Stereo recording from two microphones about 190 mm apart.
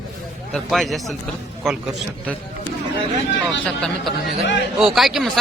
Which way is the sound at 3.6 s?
Centre (ahead or behind).